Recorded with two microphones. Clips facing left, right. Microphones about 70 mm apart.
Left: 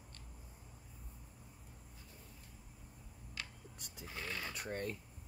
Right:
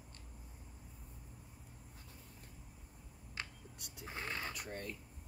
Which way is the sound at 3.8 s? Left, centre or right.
Right.